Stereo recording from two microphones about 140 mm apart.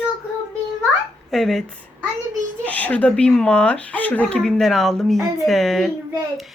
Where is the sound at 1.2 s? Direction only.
Centre (ahead or behind).